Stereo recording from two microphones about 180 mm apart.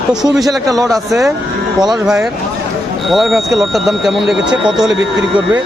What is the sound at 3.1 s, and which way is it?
Speech, centre (ahead or behind).